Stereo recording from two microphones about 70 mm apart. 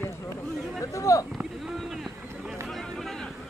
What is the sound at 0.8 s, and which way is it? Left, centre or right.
Speech, left.